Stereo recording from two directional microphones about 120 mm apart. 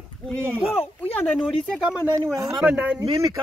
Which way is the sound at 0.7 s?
15° left (ahead or behind).